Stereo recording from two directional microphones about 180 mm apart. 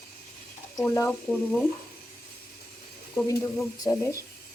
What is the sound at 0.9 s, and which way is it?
Speech, 15° left (ahead or behind).